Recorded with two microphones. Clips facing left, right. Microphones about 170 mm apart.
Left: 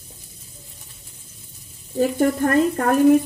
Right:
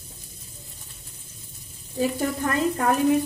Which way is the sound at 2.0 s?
50° left (ahead or behind).